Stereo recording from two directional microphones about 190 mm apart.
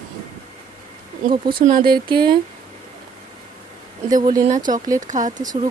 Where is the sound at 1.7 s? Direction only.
50° right (ahead or behind).